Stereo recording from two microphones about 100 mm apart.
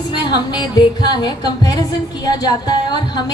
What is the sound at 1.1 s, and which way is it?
A woman's voice, 45° left (ahead or behind).